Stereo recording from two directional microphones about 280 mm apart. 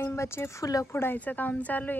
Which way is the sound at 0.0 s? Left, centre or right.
Centre.